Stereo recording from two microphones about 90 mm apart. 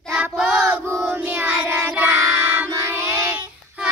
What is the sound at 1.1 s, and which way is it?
Child singing, 20° right (ahead or behind).